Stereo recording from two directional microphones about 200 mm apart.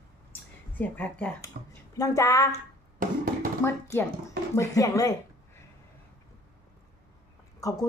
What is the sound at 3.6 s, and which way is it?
Speech, 10° left (ahead or behind).